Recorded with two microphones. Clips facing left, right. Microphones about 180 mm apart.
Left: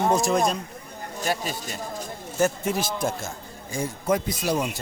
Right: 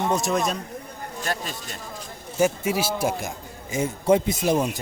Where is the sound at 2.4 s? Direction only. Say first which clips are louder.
Right 2 dB; 10° right (ahead or behind).